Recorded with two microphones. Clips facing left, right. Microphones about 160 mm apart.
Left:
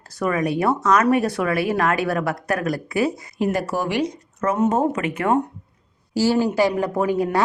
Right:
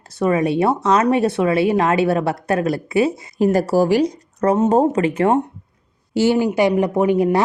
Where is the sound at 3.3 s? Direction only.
40° right (ahead or behind).